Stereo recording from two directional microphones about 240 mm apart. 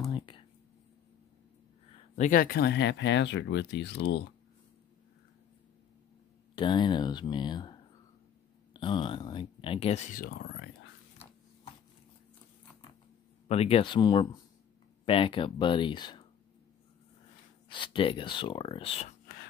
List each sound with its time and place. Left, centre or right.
2.1 s speech: left
6.5 s speech: centre; by 10.9 s left
13.5 s speech: left
17.6 s speech: centre